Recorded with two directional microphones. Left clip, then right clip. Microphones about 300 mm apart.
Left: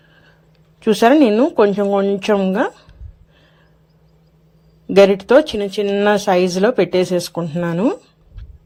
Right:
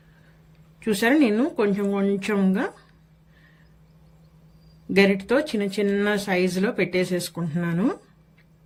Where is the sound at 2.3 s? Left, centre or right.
Left.